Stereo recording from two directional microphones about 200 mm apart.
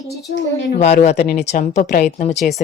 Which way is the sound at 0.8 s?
35° left (ahead or behind).